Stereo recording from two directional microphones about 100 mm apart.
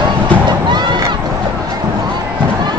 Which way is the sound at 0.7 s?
50° right (ahead or behind).